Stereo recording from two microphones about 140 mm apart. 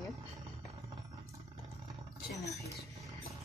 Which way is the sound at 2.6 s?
25° right (ahead or behind).